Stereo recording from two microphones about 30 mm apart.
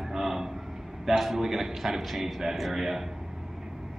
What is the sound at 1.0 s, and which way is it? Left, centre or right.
A man's voice, centre.